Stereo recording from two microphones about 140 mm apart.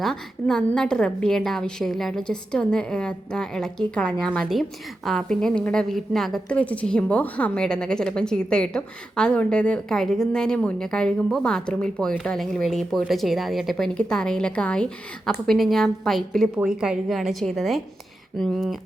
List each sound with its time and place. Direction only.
0.0 s a woman's voice: 5° left (ahead or behind)